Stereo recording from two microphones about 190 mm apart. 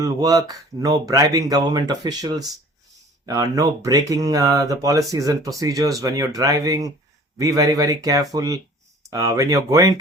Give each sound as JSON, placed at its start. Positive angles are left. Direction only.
{"t": 0.0, "sound": "speech", "side_deg": -20}